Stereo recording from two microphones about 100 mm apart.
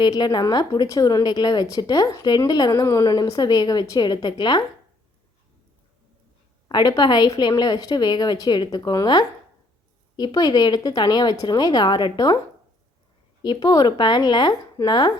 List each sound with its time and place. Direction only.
0.0 s speech: 45° left (ahead or behind)
6.7 s speech: 45° left (ahead or behind)
13.4 s speech: 40° left (ahead or behind)